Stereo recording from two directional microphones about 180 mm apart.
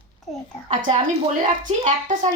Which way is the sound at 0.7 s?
45° right (ahead or behind).